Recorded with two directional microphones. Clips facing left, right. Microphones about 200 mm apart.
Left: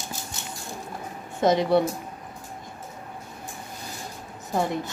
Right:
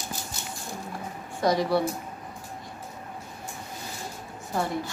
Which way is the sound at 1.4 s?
20° left (ahead or behind).